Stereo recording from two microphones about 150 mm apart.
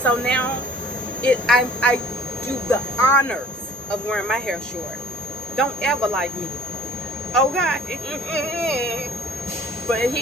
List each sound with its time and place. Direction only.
0.0 s a woman's voice: 10° left (ahead or behind)
2.6 s a woman's voice: 15° left (ahead or behind)
4.1 s speech: centre (ahead or behind)
5.5 s speech: centre (ahead or behind)
7.3 s speech: centre (ahead or behind)